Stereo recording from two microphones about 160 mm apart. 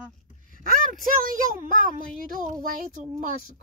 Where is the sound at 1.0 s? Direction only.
60° right (ahead or behind).